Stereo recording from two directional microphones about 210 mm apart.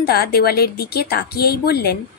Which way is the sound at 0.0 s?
45° left (ahead or behind).